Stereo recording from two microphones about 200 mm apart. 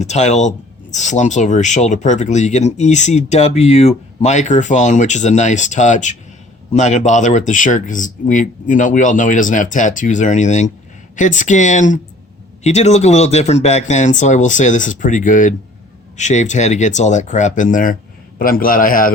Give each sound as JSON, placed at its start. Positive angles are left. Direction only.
{"t": 0.0, "sound": "a man's voice", "side_deg": 35}